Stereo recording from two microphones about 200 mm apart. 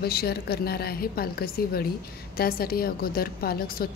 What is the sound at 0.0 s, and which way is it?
A woman's voice, 50° left (ahead or behind).